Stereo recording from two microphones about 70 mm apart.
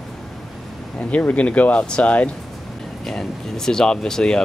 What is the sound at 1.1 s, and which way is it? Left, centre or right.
Speech, centre.